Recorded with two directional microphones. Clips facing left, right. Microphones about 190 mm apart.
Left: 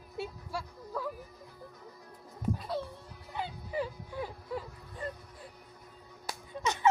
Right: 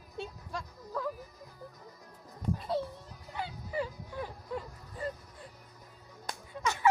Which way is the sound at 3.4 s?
15° left (ahead or behind).